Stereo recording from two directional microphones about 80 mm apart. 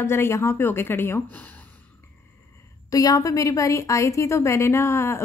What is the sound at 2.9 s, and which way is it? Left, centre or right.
A woman's voice, left.